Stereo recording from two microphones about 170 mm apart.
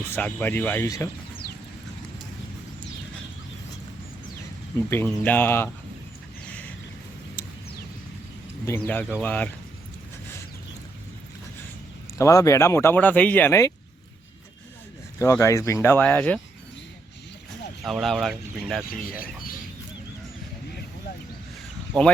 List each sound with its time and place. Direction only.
0.2 s speech: 10° left (ahead or behind)
4.9 s speech: 10° left (ahead or behind)
8.9 s speech: 10° left (ahead or behind)
12.1 s speech: 20° left (ahead or behind)
15.2 s speech: 15° left (ahead or behind)
17.8 s speech: centre (ahead or behind)
21.9 s speech: 25° right (ahead or behind)